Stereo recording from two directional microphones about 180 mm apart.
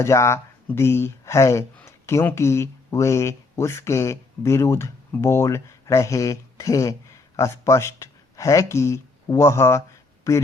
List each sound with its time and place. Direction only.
0.0 s speech: 15° left (ahead or behind)